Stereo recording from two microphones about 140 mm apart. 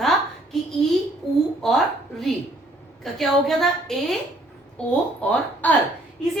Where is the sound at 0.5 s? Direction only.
Centre (ahead or behind).